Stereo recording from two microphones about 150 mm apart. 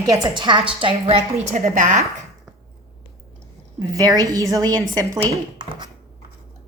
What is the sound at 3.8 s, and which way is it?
A woman's voice, 25° right (ahead or behind).